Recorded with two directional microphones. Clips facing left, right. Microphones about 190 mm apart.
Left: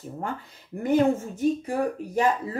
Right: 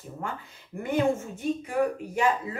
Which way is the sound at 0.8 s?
40° left (ahead or behind).